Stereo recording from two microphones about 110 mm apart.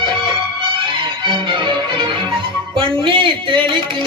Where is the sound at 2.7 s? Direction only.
50° right (ahead or behind).